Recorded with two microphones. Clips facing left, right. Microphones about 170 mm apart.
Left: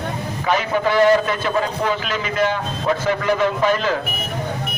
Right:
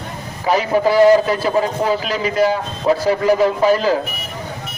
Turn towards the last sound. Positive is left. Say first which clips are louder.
# right 4 dB
turn(degrees=-35)  # may be behind; listen again after turning